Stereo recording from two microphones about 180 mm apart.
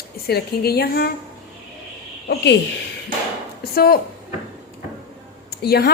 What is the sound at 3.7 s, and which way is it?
Speech, 55° left (ahead or behind).